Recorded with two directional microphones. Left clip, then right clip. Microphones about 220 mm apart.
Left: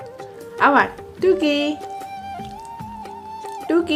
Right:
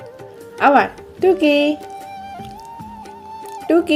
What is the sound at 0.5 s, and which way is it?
Speech, 15° right (ahead or behind).